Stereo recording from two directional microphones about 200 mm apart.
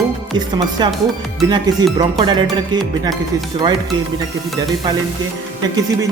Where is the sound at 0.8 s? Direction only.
20° right (ahead or behind).